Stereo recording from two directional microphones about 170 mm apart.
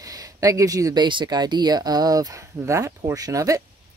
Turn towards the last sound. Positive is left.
turn(degrees=-20)  # may be behind; listen again after turning